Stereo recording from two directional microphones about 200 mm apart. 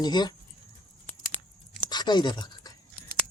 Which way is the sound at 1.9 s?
20° left (ahead or behind).